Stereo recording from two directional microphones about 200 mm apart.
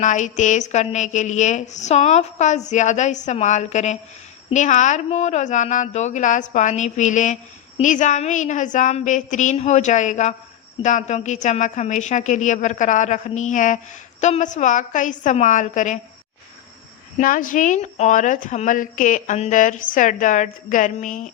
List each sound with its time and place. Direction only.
0.0 s a woman's voice: 40° left (ahead or behind)
17.2 s a woman's voice: 40° left (ahead or behind)